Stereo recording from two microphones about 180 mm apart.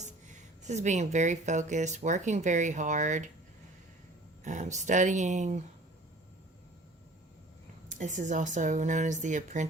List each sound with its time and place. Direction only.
0.0 s speech: 40° right (ahead or behind)
4.4 s speech: 40° right (ahead or behind)
7.9 s speech: 45° right (ahead or behind)